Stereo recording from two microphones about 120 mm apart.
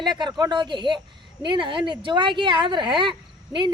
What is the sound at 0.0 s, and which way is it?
Speech, 40° right (ahead or behind).